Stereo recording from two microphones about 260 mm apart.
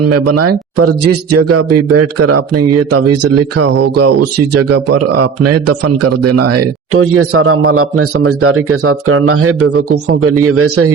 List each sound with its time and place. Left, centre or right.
0.1 s speech: right